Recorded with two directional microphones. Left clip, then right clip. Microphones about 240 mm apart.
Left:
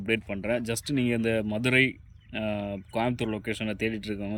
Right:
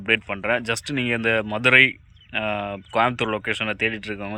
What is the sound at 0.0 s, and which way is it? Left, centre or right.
Speech, centre.